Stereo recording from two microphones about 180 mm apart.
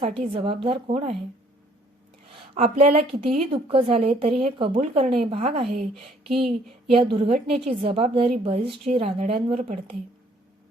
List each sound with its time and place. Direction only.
0.0 s a woman's voice: 30° right (ahead or behind)
2.7 s a woman's voice: 35° right (ahead or behind)
6.3 s a sound: centre (ahead or behind)
6.9 s a woman's voice: 30° right (ahead or behind)